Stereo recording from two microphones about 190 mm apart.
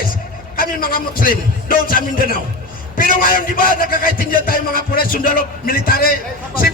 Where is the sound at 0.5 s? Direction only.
50° left (ahead or behind).